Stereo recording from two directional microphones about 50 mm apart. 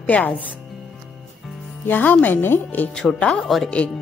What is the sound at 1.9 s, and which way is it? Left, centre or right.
Speech, left.